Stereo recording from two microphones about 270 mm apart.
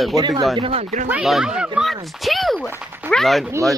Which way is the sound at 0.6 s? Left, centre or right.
Right.